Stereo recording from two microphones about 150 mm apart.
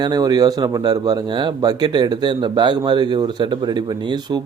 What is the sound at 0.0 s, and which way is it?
Speech, 25° right (ahead or behind).